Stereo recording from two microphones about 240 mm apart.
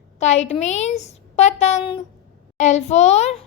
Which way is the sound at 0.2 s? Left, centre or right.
Left.